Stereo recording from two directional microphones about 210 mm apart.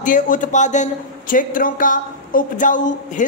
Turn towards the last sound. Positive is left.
turn(degrees=35)  # may be behind; listen again after turning